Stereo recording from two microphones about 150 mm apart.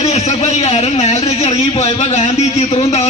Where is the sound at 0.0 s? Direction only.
45° left (ahead or behind).